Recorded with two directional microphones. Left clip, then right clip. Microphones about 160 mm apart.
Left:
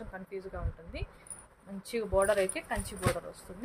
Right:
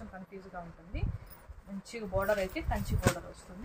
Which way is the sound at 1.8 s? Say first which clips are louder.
Left 6 dB; 90° left.